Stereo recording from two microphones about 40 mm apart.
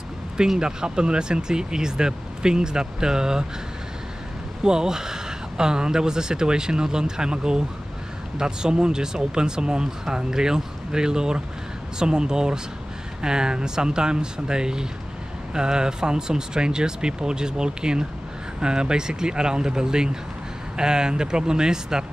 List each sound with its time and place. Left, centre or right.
0.6 s speech: centre
4.6 s speech: centre